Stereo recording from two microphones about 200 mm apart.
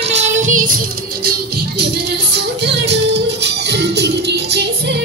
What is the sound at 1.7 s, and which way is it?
Music, 55° right (ahead or behind).